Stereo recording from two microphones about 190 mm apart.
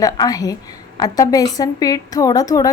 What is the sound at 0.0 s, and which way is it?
A woman's voice, 20° left (ahead or behind).